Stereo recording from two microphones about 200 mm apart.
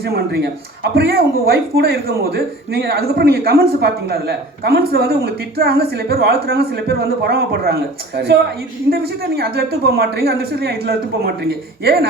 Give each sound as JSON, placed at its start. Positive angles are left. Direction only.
{"t": 0.0, "sound": "a man's voice", "side_deg": -50}